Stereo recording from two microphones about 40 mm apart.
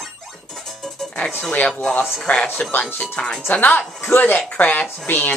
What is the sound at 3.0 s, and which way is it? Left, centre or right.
Speech, left.